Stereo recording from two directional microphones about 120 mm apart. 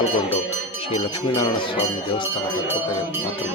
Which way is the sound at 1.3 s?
45° left (ahead or behind).